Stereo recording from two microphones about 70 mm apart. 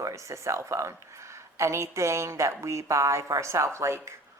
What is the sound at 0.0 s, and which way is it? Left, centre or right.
A woman's voice, right.